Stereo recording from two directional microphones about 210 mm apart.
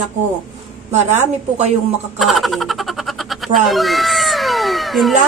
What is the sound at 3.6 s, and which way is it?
Cat, centre (ahead or behind).